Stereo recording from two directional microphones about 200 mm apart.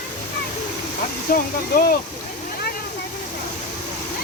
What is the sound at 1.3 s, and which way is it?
Speech, 45° left (ahead or behind).